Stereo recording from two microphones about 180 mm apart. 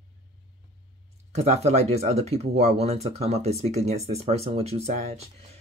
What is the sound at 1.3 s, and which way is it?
Speech, 40° right (ahead or behind).